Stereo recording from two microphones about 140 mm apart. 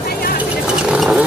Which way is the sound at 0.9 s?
5° right (ahead or behind).